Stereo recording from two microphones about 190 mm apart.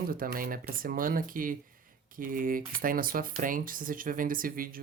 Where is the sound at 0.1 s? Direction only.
50° right (ahead or behind).